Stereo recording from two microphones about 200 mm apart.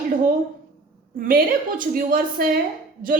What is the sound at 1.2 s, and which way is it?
A woman's voice, 45° right (ahead or behind).